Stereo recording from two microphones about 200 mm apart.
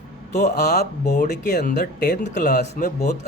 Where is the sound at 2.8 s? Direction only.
45° left (ahead or behind).